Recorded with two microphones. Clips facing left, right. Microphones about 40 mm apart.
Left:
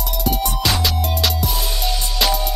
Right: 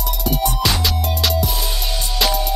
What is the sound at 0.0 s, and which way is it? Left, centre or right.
Music, centre.